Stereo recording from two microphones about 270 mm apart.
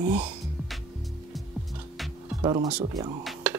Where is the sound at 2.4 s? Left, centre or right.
Centre.